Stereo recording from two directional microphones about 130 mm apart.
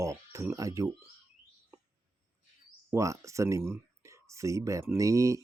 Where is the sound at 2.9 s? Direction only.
25° right (ahead or behind).